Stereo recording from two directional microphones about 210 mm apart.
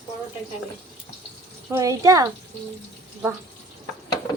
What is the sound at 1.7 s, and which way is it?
Speech, 15° right (ahead or behind).